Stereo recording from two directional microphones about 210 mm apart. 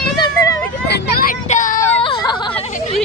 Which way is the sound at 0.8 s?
50° left (ahead or behind).